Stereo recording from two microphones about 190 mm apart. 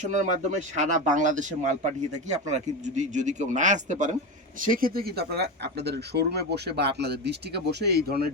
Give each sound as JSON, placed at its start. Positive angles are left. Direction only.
{"t": 0.0, "sound": "speech", "side_deg": -40}